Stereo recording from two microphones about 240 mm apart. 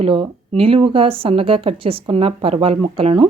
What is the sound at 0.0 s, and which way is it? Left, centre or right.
A woman's voice, right.